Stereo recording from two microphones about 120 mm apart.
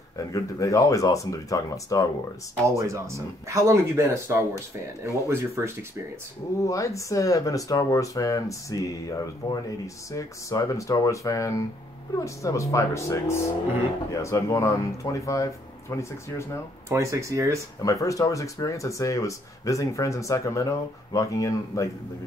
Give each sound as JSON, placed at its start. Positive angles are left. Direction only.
{"t": 0.2, "sound": "speech", "side_deg": 30}
{"t": 2.6, "sound": "speech", "side_deg": -25}
{"t": 6.6, "sound": "speech", "side_deg": 25}
{"t": 16.9, "sound": "speech", "side_deg": -25}
{"t": 17.8, "sound": "speech", "side_deg": 25}